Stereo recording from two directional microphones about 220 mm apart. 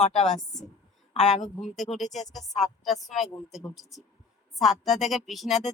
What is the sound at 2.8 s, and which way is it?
Speech, centre (ahead or behind).